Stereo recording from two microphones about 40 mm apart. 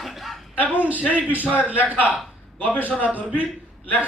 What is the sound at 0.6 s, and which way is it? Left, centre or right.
A man's voice, right.